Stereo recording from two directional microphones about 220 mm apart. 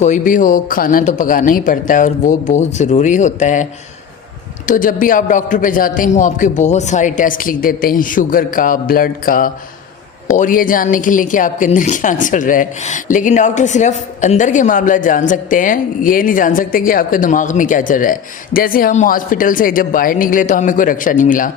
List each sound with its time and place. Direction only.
0.0 s a woman's voice: 35° left (ahead or behind)